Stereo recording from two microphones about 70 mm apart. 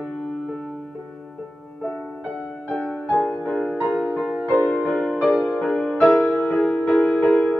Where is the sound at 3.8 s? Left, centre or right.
Centre.